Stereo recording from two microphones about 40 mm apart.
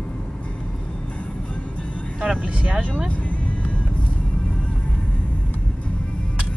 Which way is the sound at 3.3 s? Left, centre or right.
Left.